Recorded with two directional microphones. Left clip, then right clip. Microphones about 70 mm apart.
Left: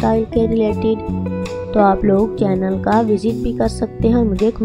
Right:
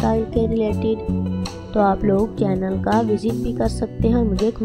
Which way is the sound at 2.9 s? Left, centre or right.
Centre.